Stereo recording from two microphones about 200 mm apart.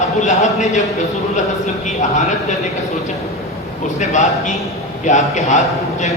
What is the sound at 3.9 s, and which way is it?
Speech, 35° left (ahead or behind).